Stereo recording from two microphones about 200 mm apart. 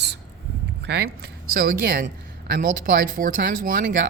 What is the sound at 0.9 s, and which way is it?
Speech, 55° right (ahead or behind).